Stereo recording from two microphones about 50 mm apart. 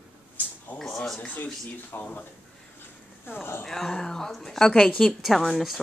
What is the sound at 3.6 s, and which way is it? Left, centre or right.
Speech, centre.